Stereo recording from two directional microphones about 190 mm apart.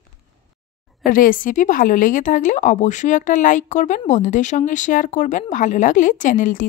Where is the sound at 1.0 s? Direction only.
45° left (ahead or behind).